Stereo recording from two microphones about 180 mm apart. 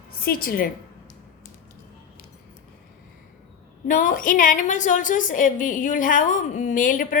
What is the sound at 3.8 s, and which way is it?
A woman's voice, 45° left (ahead or behind).